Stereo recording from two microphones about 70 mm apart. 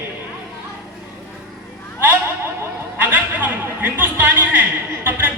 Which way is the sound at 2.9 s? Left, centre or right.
Right.